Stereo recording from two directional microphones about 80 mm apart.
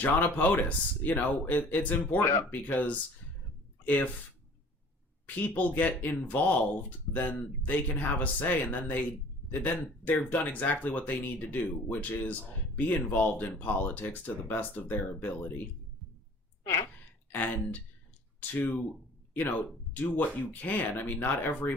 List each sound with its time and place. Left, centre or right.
0.0 s speech: left
5.5 s speech: left
17.3 s speech: left